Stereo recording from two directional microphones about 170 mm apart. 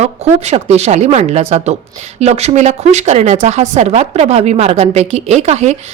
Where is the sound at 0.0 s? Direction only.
40° right (ahead or behind).